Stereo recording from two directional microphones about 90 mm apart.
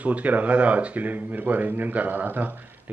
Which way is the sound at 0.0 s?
15° right (ahead or behind).